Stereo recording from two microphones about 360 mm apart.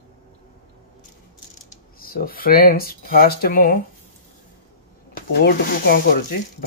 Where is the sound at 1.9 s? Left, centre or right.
Left.